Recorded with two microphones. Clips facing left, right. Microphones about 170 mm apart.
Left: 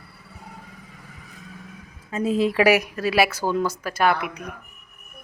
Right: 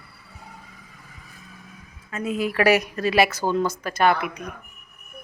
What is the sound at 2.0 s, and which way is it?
Speech, 30° left (ahead or behind).